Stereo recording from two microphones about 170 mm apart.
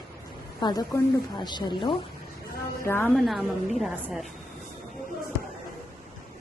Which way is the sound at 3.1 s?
Centre (ahead or behind).